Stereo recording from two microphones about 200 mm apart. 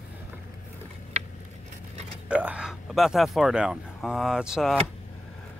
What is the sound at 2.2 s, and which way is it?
Speech, 5° right (ahead or behind).